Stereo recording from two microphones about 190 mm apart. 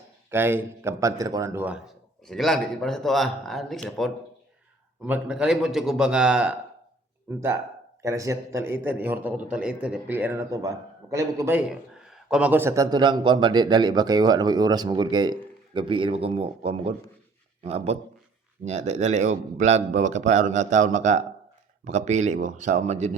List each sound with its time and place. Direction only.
0.3 s speech: 10° right (ahead or behind)
2.2 s speech: centre (ahead or behind)
8.0 s speech: 15° right (ahead or behind)
11.7 s a man's voice: 5° right (ahead or behind); by 23.1 s 35° right (ahead or behind)